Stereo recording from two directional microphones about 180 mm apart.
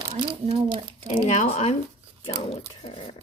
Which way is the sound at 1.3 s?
40° left (ahead or behind).